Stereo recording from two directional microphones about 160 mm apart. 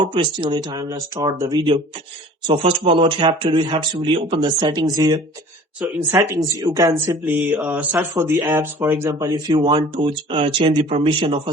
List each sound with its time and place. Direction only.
0.0 s speech: 30° right (ahead or behind)
9.3 s speech: 30° right (ahead or behind)